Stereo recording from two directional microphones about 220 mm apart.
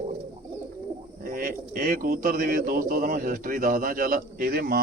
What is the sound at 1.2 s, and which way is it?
Speech, 40° right (ahead or behind).